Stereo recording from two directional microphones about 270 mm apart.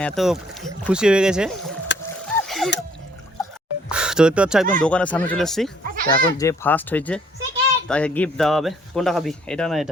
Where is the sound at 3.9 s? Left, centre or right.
Centre.